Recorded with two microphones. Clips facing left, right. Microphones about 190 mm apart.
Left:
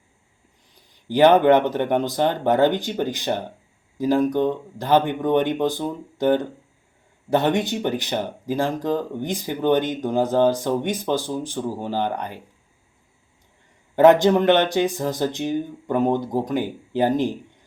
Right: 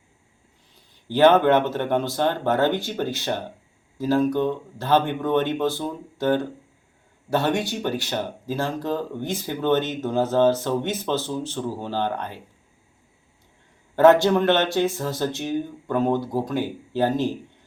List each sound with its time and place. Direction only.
0.8 s speech: 15° left (ahead or behind)
13.9 s speech: 15° left (ahead or behind)